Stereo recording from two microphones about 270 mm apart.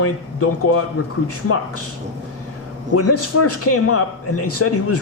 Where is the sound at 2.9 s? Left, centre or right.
Left.